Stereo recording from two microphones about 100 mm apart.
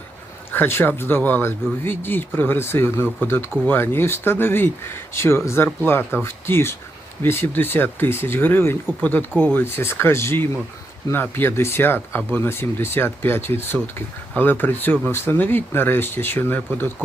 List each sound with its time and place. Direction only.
0.5 s speech: 20° left (ahead or behind)